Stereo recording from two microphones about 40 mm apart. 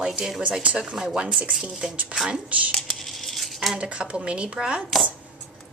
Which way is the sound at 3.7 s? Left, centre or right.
Right.